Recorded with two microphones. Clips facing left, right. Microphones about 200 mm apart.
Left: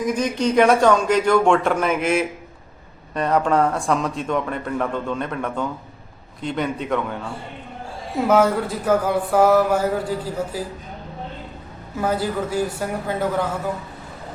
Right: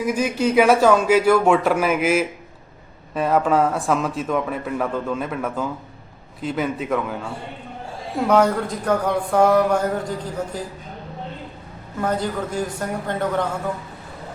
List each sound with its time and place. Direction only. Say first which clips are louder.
0.0 s a man's voice: even; 10° right (ahead or behind)
8.3 s a man's voice: even; 5° left (ahead or behind)
11.9 s speech: left 1 dB; 5° left (ahead or behind)